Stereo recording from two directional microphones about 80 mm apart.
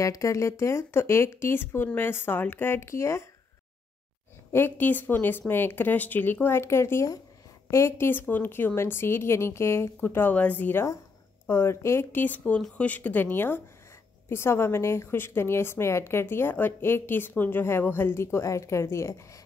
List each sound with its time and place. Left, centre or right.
0.0 s a woman's voice: left
4.5 s a woman's voice: left